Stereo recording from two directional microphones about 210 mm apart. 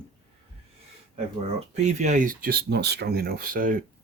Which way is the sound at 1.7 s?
35° right (ahead or behind).